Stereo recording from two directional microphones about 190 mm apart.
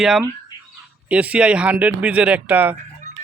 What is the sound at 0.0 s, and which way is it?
Speech, centre (ahead or behind).